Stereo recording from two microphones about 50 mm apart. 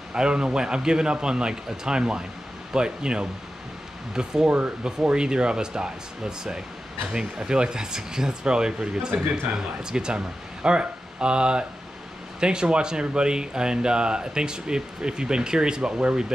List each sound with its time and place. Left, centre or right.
0.1 s speech: centre
4.5 s speech: right
4.8 s speech: centre